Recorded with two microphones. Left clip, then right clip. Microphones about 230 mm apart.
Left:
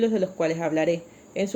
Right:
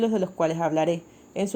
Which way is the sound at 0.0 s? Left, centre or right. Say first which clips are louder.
Left 1 dB; right.